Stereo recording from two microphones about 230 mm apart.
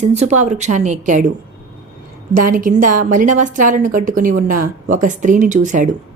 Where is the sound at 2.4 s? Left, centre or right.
Right.